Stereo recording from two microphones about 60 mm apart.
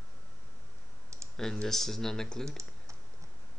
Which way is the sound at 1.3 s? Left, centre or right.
Centre.